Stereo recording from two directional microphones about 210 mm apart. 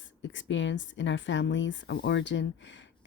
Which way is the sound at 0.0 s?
60° left (ahead or behind).